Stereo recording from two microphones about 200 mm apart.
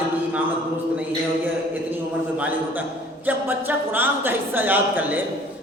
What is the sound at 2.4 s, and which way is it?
Speech, 10° right (ahead or behind).